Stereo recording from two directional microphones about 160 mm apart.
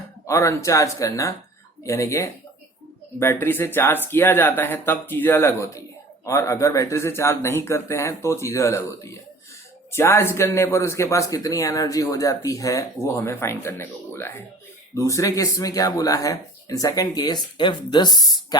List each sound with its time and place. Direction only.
0.3 s speech: 20° left (ahead or behind)
3.4 s speech: 15° left (ahead or behind)